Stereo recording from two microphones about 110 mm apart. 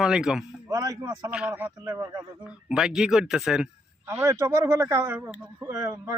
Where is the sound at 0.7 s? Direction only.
30° right (ahead or behind).